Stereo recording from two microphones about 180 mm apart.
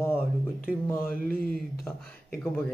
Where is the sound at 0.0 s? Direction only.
10° left (ahead or behind).